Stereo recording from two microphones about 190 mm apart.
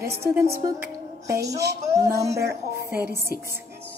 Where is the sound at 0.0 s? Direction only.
15° right (ahead or behind).